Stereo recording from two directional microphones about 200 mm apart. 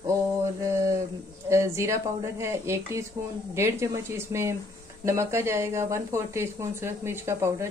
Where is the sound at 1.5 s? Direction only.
15° right (ahead or behind).